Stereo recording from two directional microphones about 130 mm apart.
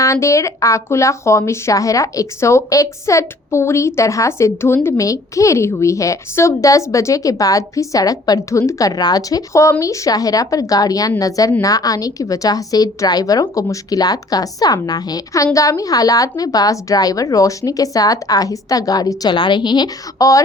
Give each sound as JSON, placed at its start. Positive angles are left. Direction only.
{"t": 0.0, "sound": "speech", "side_deg": 25}